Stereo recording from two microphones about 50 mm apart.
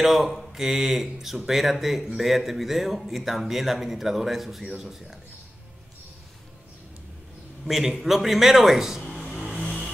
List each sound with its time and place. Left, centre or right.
0.0 s speech: centre
7.6 s speech: centre
9.1 s music: centre